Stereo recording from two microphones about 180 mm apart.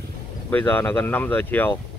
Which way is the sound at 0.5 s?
10° left (ahead or behind).